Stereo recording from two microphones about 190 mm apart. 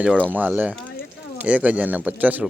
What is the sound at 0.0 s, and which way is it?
Speech, 5° left (ahead or behind).